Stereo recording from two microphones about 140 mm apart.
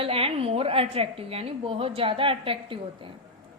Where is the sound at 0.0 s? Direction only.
40° right (ahead or behind).